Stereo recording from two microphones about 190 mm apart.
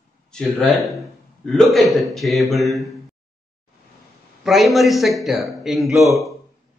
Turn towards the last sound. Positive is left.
turn(degrees=-15)  # may be behind; listen again after turning